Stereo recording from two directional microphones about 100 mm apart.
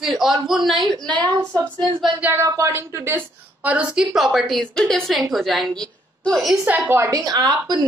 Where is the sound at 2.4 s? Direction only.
30° right (ahead or behind).